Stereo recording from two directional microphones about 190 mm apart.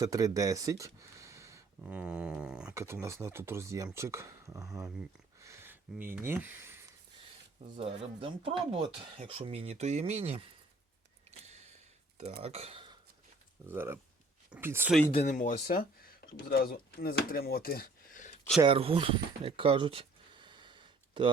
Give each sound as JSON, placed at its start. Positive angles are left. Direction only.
{"t": 0.0, "sound": "speech", "side_deg": -20}
{"t": 1.8, "sound": "dog", "side_deg": -5}
{"t": 2.7, "sound": "speech", "side_deg": -15}
{"t": 5.4, "sound": "a sound", "side_deg": -15}
{"t": 6.1, "sound": "speech", "side_deg": -10}
{"t": 7.8, "sound": "speech", "side_deg": -30}
{"t": 11.3, "sound": "a sound", "side_deg": -35}
{"t": 12.1, "sound": "speech", "side_deg": -35}
{"t": 13.7, "sound": "speech", "side_deg": -10}
{"t": 15.1, "sound": "speech", "side_deg": 40}
{"t": 18.6, "sound": "a sound", "side_deg": -30}